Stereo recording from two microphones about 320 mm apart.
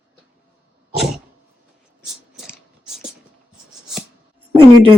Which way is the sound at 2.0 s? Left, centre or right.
Centre.